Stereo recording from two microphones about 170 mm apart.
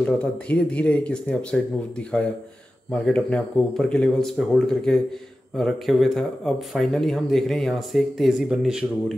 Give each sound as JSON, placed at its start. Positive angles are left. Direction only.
{"t": 0.0, "sound": "speech", "side_deg": 10}